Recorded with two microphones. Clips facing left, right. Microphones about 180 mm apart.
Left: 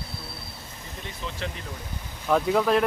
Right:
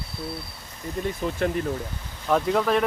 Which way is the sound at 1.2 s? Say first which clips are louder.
Right 8 dB; 50° right (ahead or behind).